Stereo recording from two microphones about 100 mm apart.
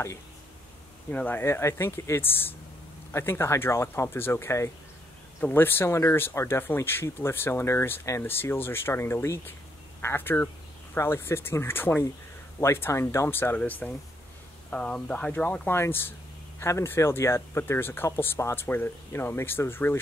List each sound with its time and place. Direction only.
1.1 s speech: 15° left (ahead or behind)